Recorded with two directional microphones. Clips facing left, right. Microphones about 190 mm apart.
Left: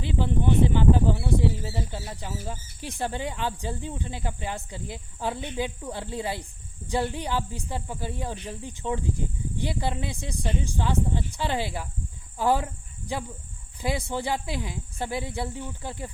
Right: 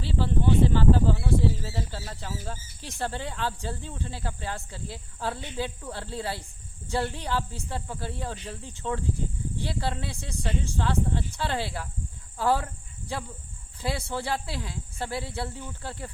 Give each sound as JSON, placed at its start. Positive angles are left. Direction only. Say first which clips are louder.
{"t": 0.0, "sound": "speech", "louder": "left 1 dB", "side_deg": 15}